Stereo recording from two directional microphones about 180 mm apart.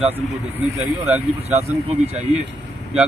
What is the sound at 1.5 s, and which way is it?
Speech, 35° right (ahead or behind).